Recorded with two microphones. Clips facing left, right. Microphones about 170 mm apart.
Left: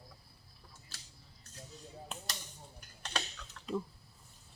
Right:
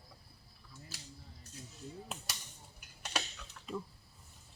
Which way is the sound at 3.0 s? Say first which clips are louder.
Even; 5° right (ahead or behind).